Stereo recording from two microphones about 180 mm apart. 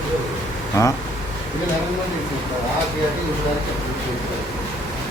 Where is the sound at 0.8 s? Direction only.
15° left (ahead or behind).